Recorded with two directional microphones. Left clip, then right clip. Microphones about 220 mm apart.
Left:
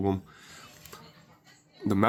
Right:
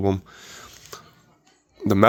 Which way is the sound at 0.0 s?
50° right (ahead or behind).